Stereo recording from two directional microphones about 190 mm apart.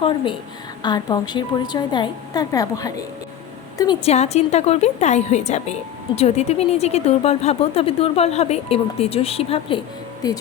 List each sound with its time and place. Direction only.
0.8 s a woman's voice: 20° left (ahead or behind)
4.0 s a woman's voice: 35° left (ahead or behind)